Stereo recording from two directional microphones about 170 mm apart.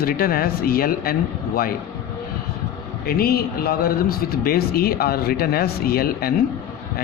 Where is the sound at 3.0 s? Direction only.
65° left (ahead or behind).